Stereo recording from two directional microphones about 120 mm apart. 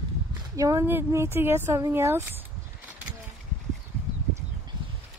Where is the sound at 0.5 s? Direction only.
25° right (ahead or behind).